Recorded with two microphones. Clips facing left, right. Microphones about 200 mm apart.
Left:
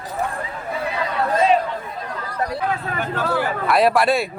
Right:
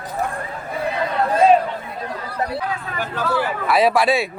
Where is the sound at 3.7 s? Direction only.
Centre (ahead or behind).